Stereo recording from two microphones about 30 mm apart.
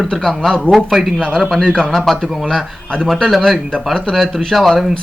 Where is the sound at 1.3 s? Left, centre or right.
Centre.